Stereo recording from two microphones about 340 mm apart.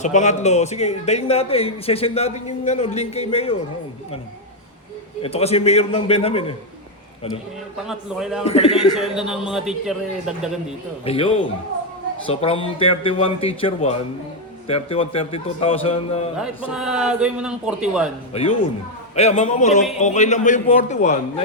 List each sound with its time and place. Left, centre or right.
0.0 s a man's voice: left
5.2 s a man's voice: centre
7.9 s a man's voice: centre
8.4 s a man's voice: centre
9.0 s a man's voice: centre
11.0 s a man's voice: centre
16.7 s a man's voice: centre
18.3 s a man's voice: centre